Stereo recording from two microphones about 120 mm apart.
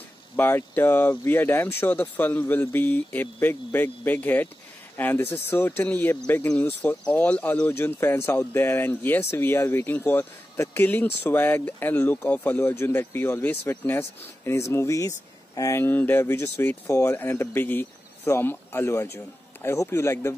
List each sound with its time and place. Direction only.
0.4 s speech: 15° left (ahead or behind)